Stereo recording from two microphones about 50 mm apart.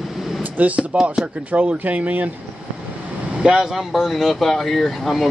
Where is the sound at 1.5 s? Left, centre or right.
Right.